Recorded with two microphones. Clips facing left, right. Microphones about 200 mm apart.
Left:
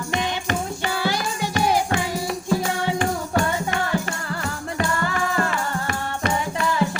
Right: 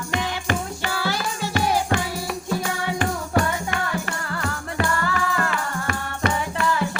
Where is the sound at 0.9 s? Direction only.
20° left (ahead or behind).